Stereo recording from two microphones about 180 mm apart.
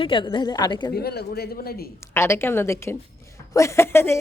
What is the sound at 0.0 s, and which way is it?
Speech, 30° left (ahead or behind).